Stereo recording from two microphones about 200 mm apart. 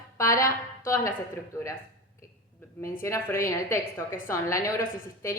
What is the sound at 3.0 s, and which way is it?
A woman's voice, 15° left (ahead or behind).